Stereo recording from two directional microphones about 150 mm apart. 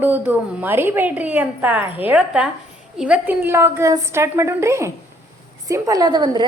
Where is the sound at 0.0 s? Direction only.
10° right (ahead or behind).